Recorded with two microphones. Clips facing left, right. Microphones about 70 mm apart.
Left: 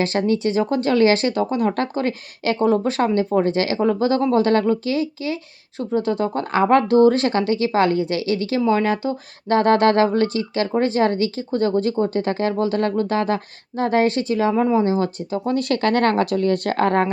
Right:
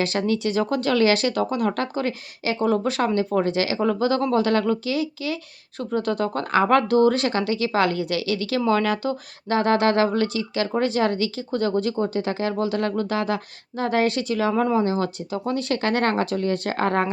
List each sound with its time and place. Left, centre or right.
0.0 s speech: left
2.6 s speech: left
9.6 s speech: left
14.5 s speech: centre; by 15.6 s left
15.6 s speech: left